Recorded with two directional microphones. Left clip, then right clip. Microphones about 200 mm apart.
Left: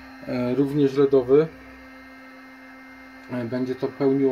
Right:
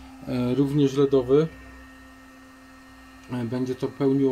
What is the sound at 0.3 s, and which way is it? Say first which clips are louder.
Speech: left 1 dB; 5° right (ahead or behind).